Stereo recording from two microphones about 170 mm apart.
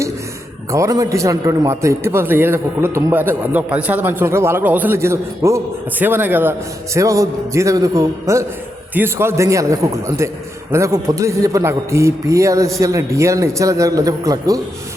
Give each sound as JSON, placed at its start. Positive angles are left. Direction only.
{"t": 0.7, "sound": "a man's voice", "side_deg": -20}